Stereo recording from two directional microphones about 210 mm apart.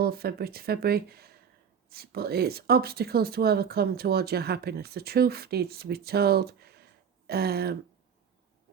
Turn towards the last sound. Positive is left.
turn(degrees=-50)  # may be behind; listen again after turning